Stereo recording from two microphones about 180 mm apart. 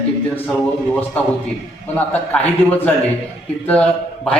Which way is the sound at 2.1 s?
10° left (ahead or behind).